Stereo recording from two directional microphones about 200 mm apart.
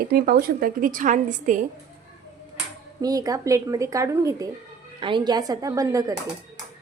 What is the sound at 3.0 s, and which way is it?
Speech, 20° right (ahead or behind).